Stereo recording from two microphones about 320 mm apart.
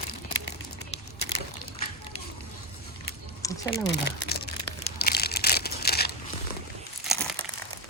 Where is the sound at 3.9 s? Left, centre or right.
Left.